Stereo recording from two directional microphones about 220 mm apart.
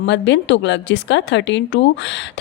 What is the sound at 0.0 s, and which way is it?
Speech, 55° left (ahead or behind).